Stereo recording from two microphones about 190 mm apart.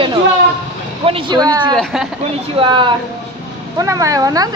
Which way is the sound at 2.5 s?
25° right (ahead or behind).